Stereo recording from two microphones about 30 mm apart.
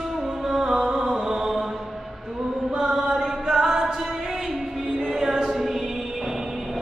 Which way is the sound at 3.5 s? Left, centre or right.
Centre.